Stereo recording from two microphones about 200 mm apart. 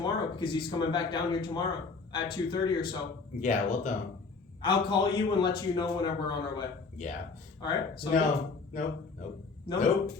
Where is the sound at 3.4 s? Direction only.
40° left (ahead or behind).